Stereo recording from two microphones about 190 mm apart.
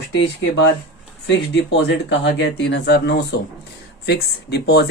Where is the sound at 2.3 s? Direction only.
65° left (ahead or behind).